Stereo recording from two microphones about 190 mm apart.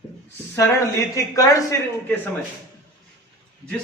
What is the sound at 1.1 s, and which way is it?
A man's voice, 15° left (ahead or behind).